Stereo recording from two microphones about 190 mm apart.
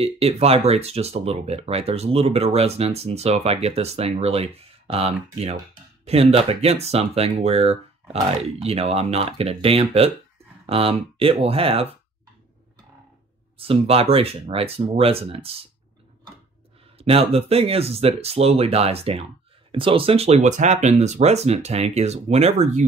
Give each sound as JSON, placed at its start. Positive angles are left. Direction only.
{"t": 0.0, "sound": "speech", "side_deg": -30}
{"t": 13.6, "sound": "speech", "side_deg": -30}
{"t": 17.0, "sound": "speech", "side_deg": -30}